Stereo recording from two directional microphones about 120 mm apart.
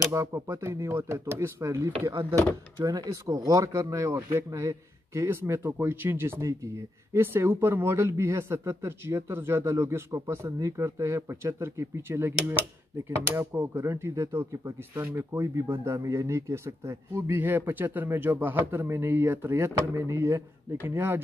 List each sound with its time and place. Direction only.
0.0 s speech: 25° right (ahead or behind)